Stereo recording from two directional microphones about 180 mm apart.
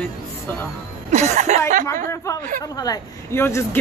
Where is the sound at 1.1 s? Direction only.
40° right (ahead or behind).